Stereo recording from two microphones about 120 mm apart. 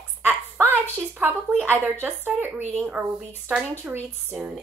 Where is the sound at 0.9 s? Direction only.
15° right (ahead or behind).